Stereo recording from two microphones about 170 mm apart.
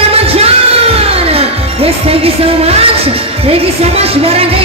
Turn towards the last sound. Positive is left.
turn(degrees=-35)  # may be behind; listen again after turning